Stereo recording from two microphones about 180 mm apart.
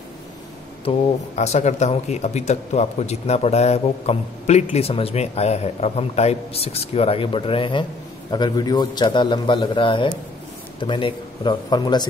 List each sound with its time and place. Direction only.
0.8 s a man's voice: 40° left (ahead or behind); by 12.1 s 25° left (ahead or behind)